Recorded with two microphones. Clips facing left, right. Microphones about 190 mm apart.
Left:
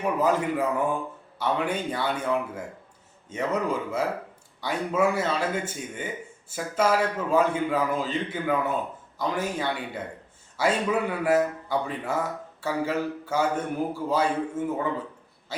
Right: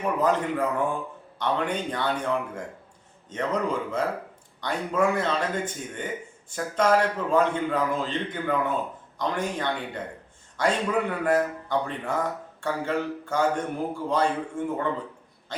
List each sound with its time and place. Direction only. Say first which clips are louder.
0.0 s a man's voice: even; 10° left (ahead or behind)